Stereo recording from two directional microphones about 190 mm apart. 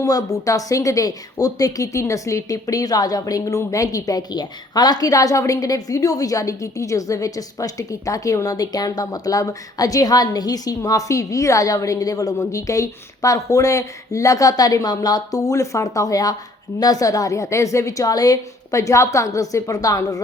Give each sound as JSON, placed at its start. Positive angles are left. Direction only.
{"t": 0.0, "sound": "a woman's voice", "side_deg": 20}